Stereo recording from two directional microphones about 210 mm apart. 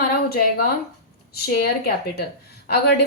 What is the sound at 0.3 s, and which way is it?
A woman's voice, 45° left (ahead or behind).